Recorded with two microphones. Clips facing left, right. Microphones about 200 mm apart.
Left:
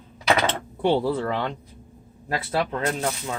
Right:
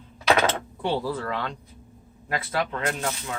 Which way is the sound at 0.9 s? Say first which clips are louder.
Left 5 dB; 25° left (ahead or behind).